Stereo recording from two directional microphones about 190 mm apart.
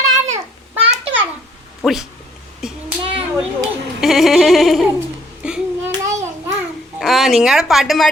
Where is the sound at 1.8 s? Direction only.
Centre (ahead or behind).